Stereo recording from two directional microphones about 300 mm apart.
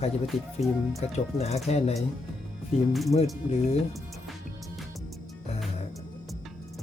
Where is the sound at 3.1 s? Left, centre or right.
Left.